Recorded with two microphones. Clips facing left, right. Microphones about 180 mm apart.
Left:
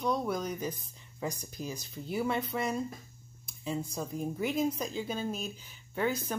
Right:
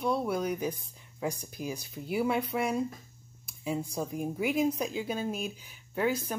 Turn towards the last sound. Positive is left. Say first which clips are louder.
# right 2 dB
turn(degrees=-5)  # may be behind; listen again after turning